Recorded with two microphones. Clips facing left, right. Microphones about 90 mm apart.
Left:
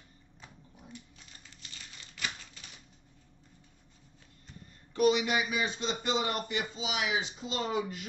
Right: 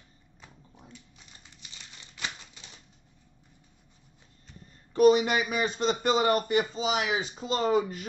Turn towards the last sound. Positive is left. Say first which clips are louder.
# right 7 dB
turn(degrees=-45)  # may be behind; listen again after turning